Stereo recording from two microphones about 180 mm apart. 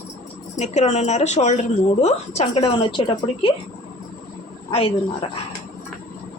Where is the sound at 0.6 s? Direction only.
40° left (ahead or behind).